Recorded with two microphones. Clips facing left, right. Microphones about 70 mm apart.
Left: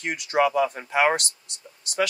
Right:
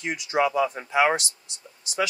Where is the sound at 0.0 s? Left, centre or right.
Left.